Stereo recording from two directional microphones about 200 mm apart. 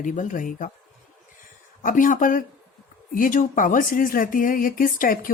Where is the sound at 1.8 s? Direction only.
40° left (ahead or behind).